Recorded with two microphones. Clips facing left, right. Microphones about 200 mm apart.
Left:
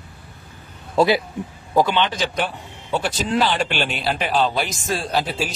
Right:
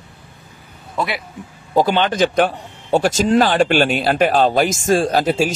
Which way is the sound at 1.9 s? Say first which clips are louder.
Right 5 dB; 45° right (ahead or behind).